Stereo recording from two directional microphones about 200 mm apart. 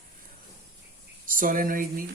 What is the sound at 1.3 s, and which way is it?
Speech, 45° right (ahead or behind).